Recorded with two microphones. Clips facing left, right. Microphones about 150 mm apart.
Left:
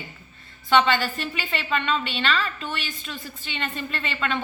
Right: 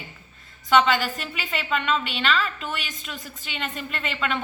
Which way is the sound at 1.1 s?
5° right (ahead or behind).